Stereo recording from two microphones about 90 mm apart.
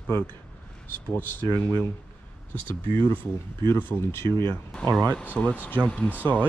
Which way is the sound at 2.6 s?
65° right (ahead or behind).